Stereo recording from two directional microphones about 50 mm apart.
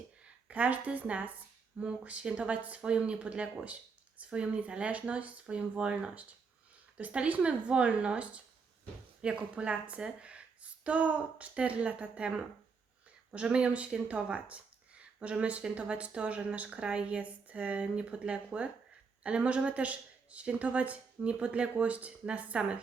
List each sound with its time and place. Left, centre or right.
0.4 s speech: right